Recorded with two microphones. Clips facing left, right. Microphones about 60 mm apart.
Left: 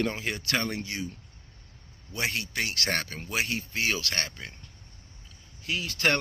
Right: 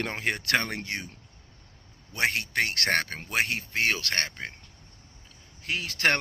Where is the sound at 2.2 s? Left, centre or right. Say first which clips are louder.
Right 4 dB; right.